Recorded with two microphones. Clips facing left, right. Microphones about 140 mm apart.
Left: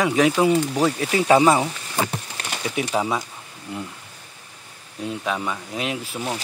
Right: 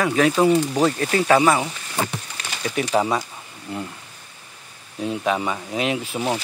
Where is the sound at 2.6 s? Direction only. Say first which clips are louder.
Right 3 dB; 5° left (ahead or behind).